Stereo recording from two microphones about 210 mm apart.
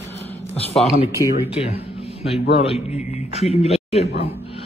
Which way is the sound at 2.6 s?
30° left (ahead or behind).